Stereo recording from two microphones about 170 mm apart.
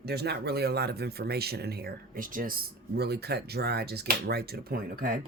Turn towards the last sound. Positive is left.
turn(degrees=-65)  # may be behind; listen again after turning